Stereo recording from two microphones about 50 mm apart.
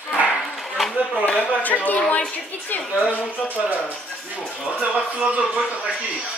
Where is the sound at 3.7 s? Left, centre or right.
Left.